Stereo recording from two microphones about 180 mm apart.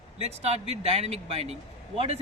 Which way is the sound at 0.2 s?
35° right (ahead or behind).